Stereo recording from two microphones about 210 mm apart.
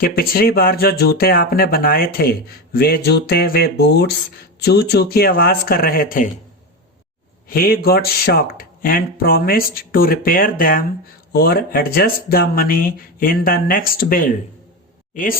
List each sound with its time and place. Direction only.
0.0 s speech: 45° left (ahead or behind)
7.4 s speech: 45° left (ahead or behind)